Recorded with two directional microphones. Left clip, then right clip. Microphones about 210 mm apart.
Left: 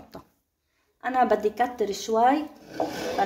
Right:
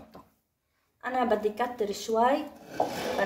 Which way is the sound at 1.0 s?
40° left (ahead or behind).